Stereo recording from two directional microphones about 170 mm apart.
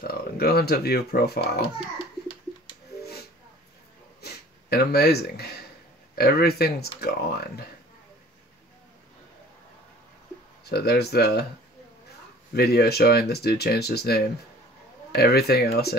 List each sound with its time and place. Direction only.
0.0 s speech: 65° left (ahead or behind)
4.2 s a sound: 70° left (ahead or behind)
6.1 s speech: 65° left (ahead or behind)
10.6 s speech: 70° left (ahead or behind)
12.5 s speech: 70° left (ahead or behind)